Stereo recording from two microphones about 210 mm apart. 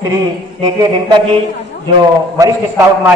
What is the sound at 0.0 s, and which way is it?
Speech, 20° right (ahead or behind).